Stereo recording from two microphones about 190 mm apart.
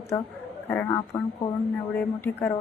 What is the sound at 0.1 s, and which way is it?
A woman's voice, 10° left (ahead or behind).